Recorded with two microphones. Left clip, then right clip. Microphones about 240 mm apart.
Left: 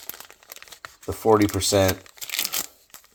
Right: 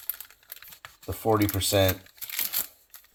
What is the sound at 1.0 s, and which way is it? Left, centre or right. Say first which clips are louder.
Speech: left 6 dB; left.